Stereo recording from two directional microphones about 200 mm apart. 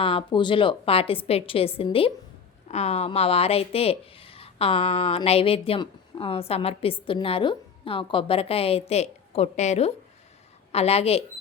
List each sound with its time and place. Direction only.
0.0 s a woman's voice: 30° left (ahead or behind)